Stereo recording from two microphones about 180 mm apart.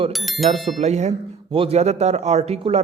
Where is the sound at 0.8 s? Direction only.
40° right (ahead or behind).